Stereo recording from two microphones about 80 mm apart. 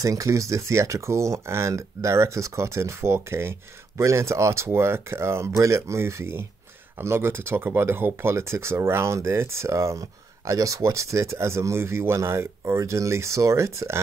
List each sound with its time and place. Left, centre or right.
0.0 s speech: right